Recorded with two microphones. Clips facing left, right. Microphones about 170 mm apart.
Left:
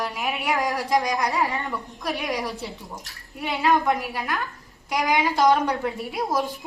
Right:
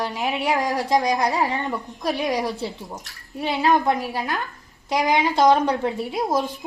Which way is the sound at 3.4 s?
35° right (ahead or behind).